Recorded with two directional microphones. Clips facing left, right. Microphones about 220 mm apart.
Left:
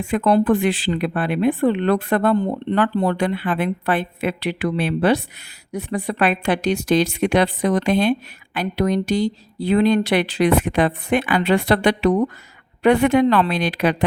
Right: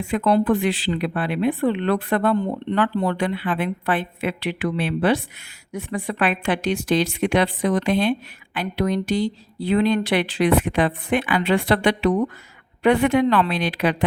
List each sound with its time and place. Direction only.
0.0 s speech: 45° left (ahead or behind)